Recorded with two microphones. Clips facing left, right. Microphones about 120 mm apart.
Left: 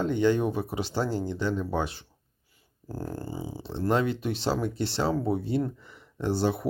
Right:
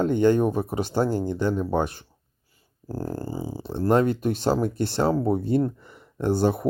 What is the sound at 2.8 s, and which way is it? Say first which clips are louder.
Speech: right 5 dB; 35° right (ahead or behind).